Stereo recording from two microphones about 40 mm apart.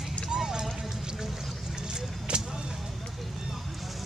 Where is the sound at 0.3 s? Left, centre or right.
Centre.